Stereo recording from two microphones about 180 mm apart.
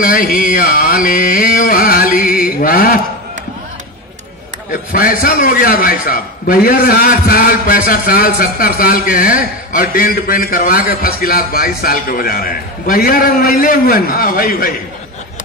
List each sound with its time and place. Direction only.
0.0 s a man's voice: 50° left (ahead or behind)
4.9 s a man's voice: 55° left (ahead or behind)